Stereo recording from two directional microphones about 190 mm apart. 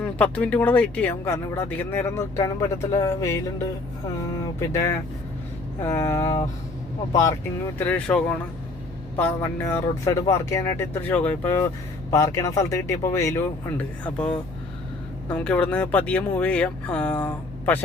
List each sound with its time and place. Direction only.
0.0 s speech: 5° left (ahead or behind)
5.8 s speech: 10° left (ahead or behind)